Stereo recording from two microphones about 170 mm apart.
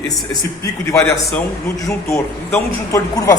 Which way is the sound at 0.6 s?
20° left (ahead or behind).